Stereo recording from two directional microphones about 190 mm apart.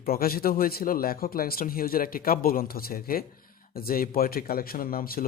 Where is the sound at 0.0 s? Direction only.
50° left (ahead or behind).